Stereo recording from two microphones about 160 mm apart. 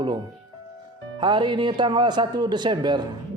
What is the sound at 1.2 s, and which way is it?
A man's voice, 30° right (ahead or behind).